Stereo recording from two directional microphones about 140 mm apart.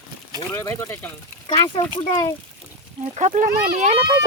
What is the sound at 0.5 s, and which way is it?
Speech, 20° left (ahead or behind).